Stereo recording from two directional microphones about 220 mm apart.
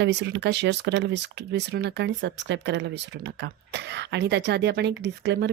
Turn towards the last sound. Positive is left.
turn(degrees=-55)  # may be behind; listen again after turning